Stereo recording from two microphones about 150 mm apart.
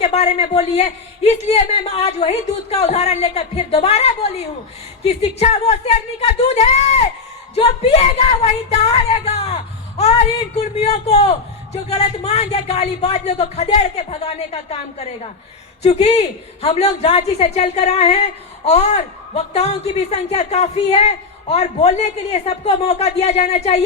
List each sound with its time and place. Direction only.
0.0 s a man's voice: 45° left (ahead or behind)